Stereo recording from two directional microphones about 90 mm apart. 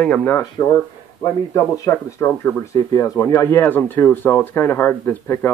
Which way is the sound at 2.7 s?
40° left (ahead or behind).